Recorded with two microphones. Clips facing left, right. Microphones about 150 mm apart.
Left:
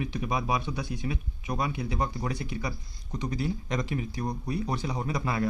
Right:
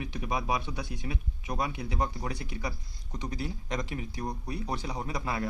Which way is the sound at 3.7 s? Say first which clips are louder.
Left 4 dB; 15° right (ahead or behind).